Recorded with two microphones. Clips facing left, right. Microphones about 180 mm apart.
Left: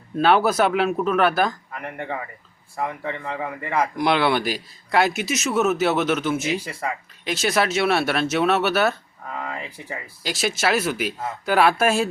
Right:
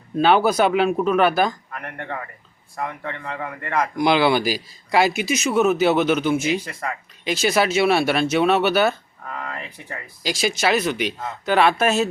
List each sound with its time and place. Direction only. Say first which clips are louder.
0.2 s a man's voice: right 1 dB; centre (ahead or behind)